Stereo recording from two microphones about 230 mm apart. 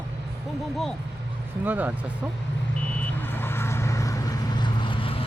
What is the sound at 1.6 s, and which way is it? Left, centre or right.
Speech, centre.